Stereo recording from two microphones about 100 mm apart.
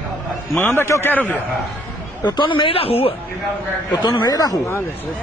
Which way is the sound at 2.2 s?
50° left (ahead or behind).